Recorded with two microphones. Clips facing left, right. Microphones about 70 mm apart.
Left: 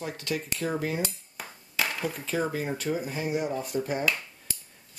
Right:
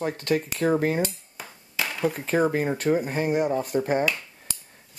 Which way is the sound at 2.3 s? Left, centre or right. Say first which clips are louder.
Right 6 dB; right.